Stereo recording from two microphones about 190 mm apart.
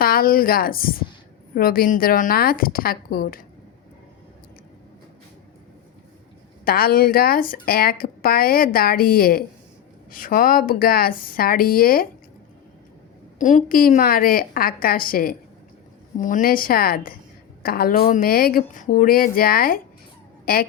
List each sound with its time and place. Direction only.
0.0 s a woman's voice: 50° left (ahead or behind)
6.7 s speech: 50° left (ahead or behind)
13.4 s speech: 40° left (ahead or behind)